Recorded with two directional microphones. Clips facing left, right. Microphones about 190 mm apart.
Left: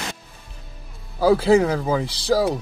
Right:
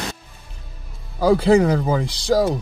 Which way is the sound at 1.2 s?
Centre (ahead or behind).